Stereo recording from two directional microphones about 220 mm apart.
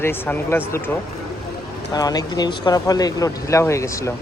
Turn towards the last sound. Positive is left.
turn(degrees=15)  # may be behind; listen again after turning